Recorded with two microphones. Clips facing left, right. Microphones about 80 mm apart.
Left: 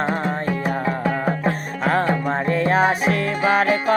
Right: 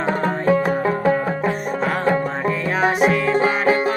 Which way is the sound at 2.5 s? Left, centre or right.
Left.